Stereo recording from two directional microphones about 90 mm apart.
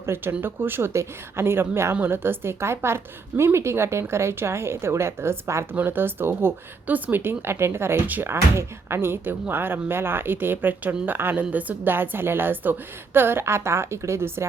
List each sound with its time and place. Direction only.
0.0 s a woman's voice: 30° right (ahead or behind)